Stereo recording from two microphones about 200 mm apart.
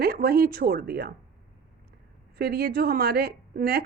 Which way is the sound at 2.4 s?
50° right (ahead or behind).